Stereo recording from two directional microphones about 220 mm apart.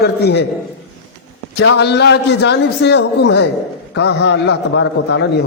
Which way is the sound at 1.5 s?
50° left (ahead or behind).